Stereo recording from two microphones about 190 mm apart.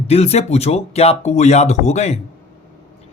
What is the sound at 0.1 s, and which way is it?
Speech, 35° left (ahead or behind).